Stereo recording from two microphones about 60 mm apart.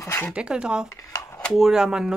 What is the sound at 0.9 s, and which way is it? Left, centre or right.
Speech, left.